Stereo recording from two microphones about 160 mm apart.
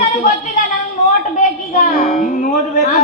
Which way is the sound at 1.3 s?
50° left (ahead or behind).